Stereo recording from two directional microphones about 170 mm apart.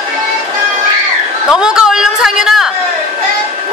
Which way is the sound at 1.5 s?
5° right (ahead or behind).